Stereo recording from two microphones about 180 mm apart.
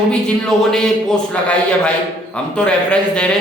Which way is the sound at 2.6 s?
5° left (ahead or behind).